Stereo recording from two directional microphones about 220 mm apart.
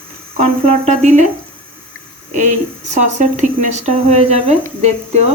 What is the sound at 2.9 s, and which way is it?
A woman's voice, 30° right (ahead or behind).